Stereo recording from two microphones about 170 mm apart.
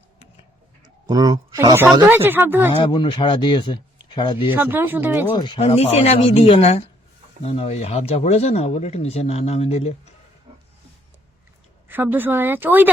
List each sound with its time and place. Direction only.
1.0 s speech: 20° right (ahead or behind)
2.8 s speech: 30° left (ahead or behind)
4.5 s speech: 10° right (ahead or behind)
5.3 s speech: 30° left (ahead or behind)
11.9 s speech: 10° right (ahead or behind)